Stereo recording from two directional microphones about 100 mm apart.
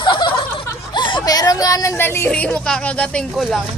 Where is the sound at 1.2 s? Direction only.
40° left (ahead or behind).